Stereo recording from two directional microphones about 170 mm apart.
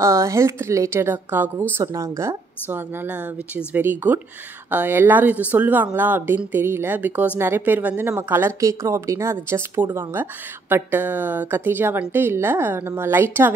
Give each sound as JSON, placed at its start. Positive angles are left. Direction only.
{"t": 0.0, "sound": "speech", "side_deg": -15}